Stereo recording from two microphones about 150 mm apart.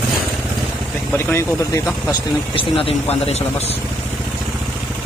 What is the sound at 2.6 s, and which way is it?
Speech, 40° left (ahead or behind).